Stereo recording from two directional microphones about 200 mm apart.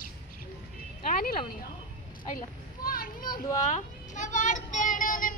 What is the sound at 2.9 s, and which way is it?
Children playing, 45° left (ahead or behind).